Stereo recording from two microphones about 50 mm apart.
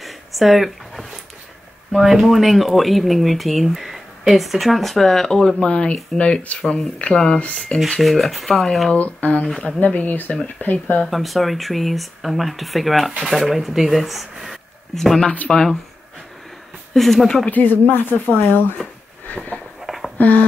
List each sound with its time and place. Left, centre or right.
0.0 s a sound: centre
1.9 s speech: centre
5.6 s speech: left
8.0 s speech: centre
8.9 s speech: left
11.1 s speech: centre
14.3 s a sound: centre
15.3 s speech: left
16.9 s speech: centre
17.5 s speech: left
20.2 s a sound: left